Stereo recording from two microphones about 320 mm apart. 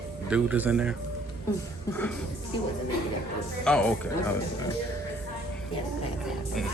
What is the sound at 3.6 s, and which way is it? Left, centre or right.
Speech, centre.